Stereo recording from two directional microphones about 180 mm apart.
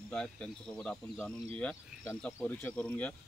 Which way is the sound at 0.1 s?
5° left (ahead or behind).